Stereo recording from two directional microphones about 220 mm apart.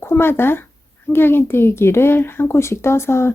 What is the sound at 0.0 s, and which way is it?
Speech, 10° left (ahead or behind).